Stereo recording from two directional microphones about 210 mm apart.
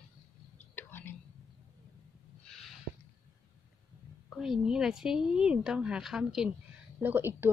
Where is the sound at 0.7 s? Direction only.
10° left (ahead or behind).